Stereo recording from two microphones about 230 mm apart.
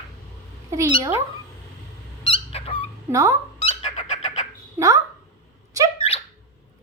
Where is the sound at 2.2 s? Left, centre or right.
Left.